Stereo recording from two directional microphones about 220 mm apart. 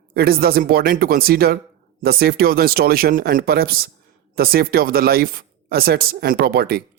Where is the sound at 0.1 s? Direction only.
45° right (ahead or behind).